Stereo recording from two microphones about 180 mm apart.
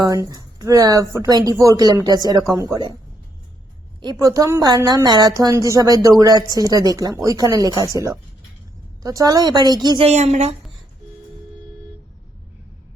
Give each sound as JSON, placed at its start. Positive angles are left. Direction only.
{"t": 0.0, "sound": "a woman's voice", "side_deg": -20}
{"t": 4.0, "sound": "speech", "side_deg": -20}
{"t": 9.0, "sound": "speech", "side_deg": -20}
{"t": 10.1, "sound": "a woman's voice", "side_deg": -40}